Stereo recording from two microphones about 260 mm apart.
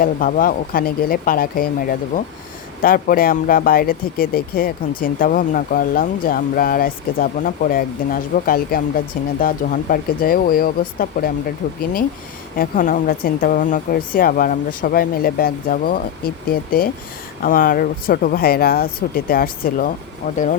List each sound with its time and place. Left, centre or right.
0.0 s speech: left